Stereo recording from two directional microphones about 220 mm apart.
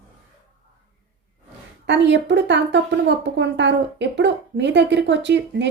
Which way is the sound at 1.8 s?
55° right (ahead or behind).